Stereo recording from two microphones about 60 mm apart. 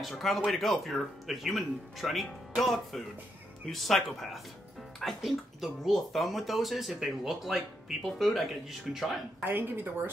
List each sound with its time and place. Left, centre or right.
0.0 s speech: centre
9.4 s a woman's voice: right